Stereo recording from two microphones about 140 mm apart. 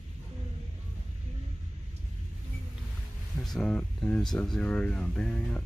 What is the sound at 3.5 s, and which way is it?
Speech, 5° left (ahead or behind).